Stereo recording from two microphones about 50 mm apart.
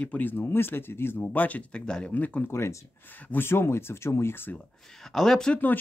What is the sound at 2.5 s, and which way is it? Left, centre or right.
Speech, left.